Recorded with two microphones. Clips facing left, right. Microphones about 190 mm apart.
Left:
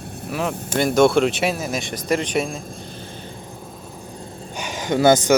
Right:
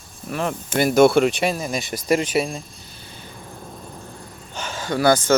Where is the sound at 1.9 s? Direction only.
10° right (ahead or behind).